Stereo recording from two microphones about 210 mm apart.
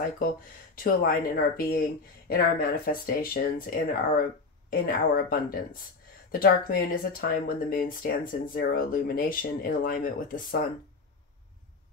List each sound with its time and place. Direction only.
0.8 s speech: 45° left (ahead or behind)